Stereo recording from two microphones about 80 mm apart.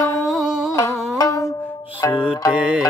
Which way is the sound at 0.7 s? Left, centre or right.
Left.